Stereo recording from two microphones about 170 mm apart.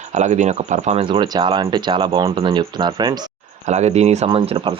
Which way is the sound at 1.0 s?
30° right (ahead or behind).